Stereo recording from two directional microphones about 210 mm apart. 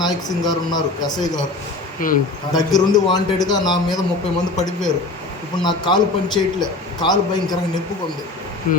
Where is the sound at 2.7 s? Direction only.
20° left (ahead or behind).